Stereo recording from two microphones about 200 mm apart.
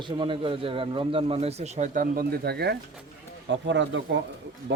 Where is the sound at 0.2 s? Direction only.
25° right (ahead or behind); by 2.7 s 55° right (ahead or behind).